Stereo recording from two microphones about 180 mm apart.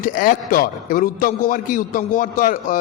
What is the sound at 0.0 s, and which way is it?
A man's voice, 50° left (ahead or behind).